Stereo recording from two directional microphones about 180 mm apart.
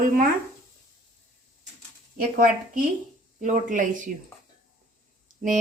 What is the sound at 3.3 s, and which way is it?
Speech, 45° right (ahead or behind).